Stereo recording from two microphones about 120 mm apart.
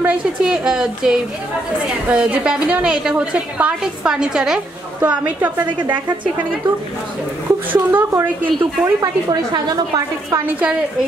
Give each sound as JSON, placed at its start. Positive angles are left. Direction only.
{"t": 0.0, "sound": "a woman's voice", "side_deg": -10}
{"t": 7.7, "sound": "a woman's voice", "side_deg": -20}
{"t": 10.4, "sound": "a woman's voice", "side_deg": -15}